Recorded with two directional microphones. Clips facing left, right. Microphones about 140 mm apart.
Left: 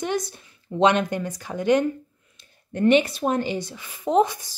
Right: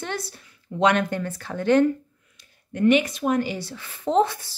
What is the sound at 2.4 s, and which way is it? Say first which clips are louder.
Speech: even; 30° left (ahead or behind).